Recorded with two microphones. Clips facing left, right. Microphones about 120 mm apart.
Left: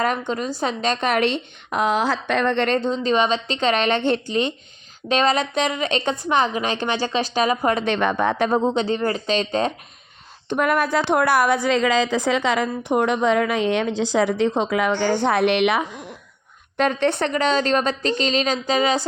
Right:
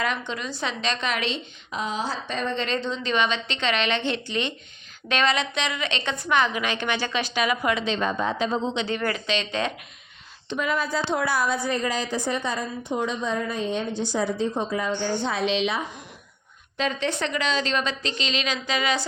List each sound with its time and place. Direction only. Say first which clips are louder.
0.0 s a woman's voice: left 6 dB; 45° left (ahead or behind)
7.9 s speech: left 5 dB; 70° left (ahead or behind); by 9.0 s 40° left (ahead or behind)
9.0 s a woman's voice: left 5 dB; 30° left (ahead or behind)
10.5 s a woman's voice: left 6 dB; 60° left (ahead or behind)
16.7 s a woman's voice: left 7 dB; 60° left (ahead or behind); by 19.0 s 40° left (ahead or behind)